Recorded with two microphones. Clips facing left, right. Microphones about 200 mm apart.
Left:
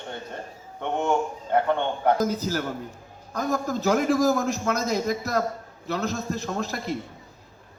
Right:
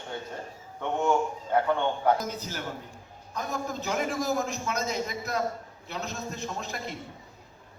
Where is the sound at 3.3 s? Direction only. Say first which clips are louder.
Left 7 dB; 40° left (ahead or behind).